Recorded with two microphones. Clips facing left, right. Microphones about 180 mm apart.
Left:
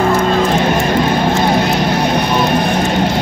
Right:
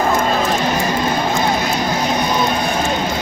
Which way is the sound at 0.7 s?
65° left (ahead or behind).